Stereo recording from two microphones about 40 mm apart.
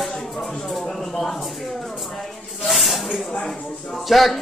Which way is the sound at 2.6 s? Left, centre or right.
Centre.